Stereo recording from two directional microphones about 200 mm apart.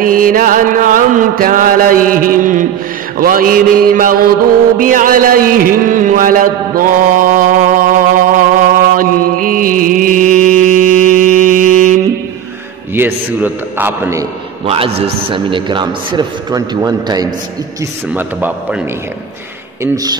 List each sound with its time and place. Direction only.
0.0 s mantra: 45° right (ahead or behind)
4.7 s a sound: 45° right (ahead or behind)
12.9 s a man's voice: 10° right (ahead or behind)
14.7 s a man's voice: 30° right (ahead or behind); by 18.8 s 10° right (ahead or behind)
19.8 s speech: 20° right (ahead or behind)